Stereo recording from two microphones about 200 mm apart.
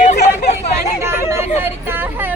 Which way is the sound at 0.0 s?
35° left (ahead or behind).